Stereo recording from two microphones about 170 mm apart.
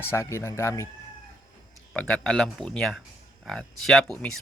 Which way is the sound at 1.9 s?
5° left (ahead or behind).